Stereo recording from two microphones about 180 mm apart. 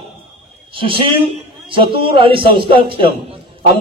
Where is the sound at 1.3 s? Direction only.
30° right (ahead or behind).